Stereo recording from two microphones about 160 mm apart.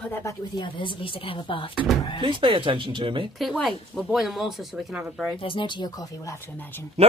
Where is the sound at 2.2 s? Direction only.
30° right (ahead or behind).